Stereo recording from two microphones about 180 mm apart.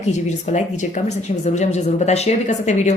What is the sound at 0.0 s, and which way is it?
A woman's voice, 40° left (ahead or behind).